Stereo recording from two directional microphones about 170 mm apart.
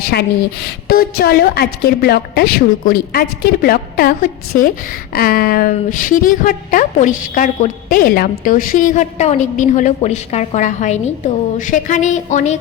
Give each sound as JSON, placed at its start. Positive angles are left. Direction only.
{"t": 0.0, "sound": "a woman's voice", "side_deg": 65}